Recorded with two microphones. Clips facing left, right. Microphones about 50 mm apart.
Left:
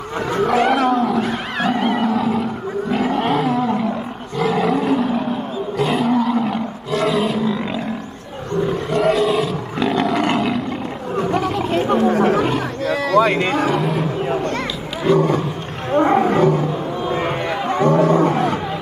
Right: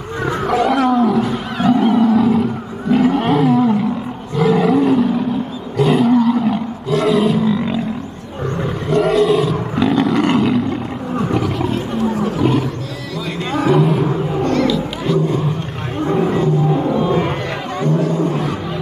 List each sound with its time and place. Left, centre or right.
0.7 s roaring cats: centre
1.6 s wild animals: left
2.0 s roaring cats: centre
2.9 s roar: centre
8.9 s roar: centre
11.7 s roaring cats: left
13.1 s cattle: left
13.7 s a sound: centre
14.3 s a sound: left
15.1 s roaring cats: left
16.0 s roaring cats: left
17.8 s roaring cats: left